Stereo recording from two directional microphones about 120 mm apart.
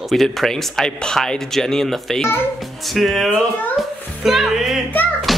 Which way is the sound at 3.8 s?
Centre (ahead or behind).